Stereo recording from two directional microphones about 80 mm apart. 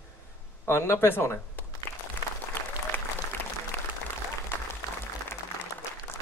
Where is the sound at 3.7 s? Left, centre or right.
Left.